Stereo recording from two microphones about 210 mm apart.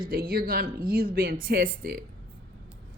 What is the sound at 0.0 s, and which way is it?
A woman's voice, 45° right (ahead or behind).